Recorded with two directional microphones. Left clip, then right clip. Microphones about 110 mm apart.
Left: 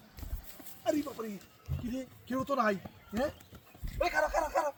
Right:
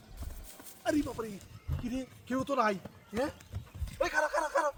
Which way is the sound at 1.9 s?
30° right (ahead or behind).